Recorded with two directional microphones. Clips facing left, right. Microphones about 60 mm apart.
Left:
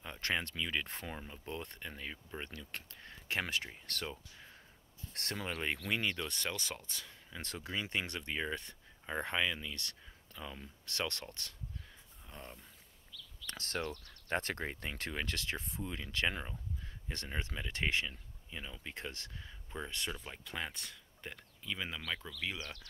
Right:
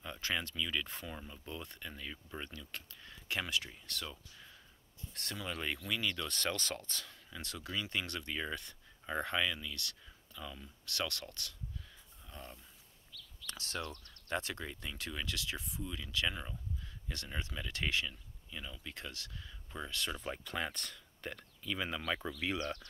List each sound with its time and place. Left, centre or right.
0.2 s speech: left
3.8 s speech: left
4.1 s speech: left
5.1 s speech: left
5.5 s speech: left
7.3 s speech: left
13.5 s speech: left
20.4 s speech: centre